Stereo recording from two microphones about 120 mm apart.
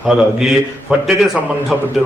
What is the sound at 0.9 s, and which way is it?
Speech, 5° right (ahead or behind).